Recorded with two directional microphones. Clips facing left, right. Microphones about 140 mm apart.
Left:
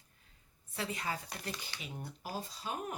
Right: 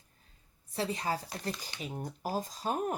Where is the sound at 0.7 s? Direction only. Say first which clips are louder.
Right 5 dB; 35° right (ahead or behind).